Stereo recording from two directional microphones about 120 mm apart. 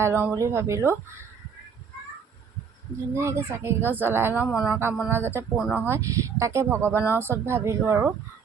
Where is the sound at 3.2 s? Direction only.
25° right (ahead or behind).